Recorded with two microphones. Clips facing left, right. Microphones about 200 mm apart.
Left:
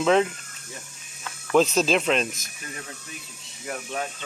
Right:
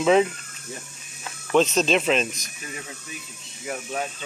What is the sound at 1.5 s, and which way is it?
Speech, 5° left (ahead or behind).